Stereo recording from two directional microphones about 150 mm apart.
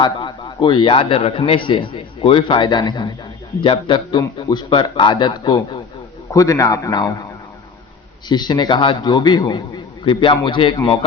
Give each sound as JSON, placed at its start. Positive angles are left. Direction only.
{"t": 0.0, "sound": "a man's voice", "side_deg": 30}
{"t": 8.3, "sound": "a man's voice", "side_deg": 30}